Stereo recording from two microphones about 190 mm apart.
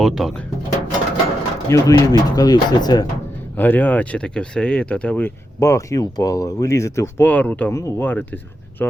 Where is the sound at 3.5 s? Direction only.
10° left (ahead or behind).